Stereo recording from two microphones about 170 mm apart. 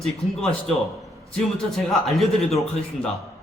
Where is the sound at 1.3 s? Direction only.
Centre (ahead or behind).